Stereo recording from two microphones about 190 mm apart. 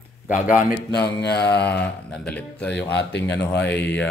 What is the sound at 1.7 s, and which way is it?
A man's voice, 5° left (ahead or behind).